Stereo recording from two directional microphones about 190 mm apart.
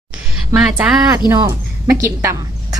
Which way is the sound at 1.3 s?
15° right (ahead or behind).